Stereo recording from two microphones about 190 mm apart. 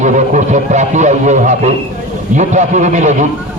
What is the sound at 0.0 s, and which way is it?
A man's voice, 40° right (ahead or behind).